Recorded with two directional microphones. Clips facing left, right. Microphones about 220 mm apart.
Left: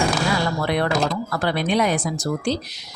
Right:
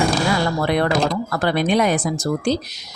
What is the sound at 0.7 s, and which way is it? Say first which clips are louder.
A woman's voice: right 3 dB; 45° right (ahead or behind).